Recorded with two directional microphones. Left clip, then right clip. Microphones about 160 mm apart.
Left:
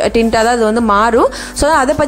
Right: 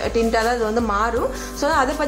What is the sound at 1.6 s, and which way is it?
Music, 40° left (ahead or behind).